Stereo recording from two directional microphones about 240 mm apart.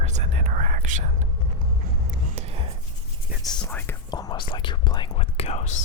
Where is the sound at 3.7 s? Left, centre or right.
Centre.